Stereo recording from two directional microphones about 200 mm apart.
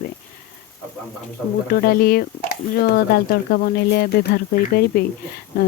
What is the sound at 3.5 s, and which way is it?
Speech, 50° left (ahead or behind).